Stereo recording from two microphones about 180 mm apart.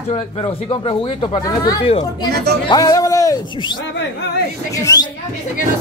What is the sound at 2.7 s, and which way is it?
Speech, 20° left (ahead or behind).